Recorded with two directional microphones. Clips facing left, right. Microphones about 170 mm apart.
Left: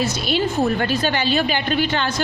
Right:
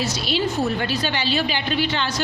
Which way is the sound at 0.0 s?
50° left (ahead or behind).